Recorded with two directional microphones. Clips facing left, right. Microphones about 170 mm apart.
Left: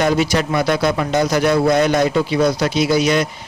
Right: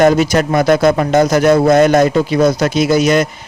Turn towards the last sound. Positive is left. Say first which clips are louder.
# right 4 dB
turn(degrees=-45)  # may be behind; listen again after turning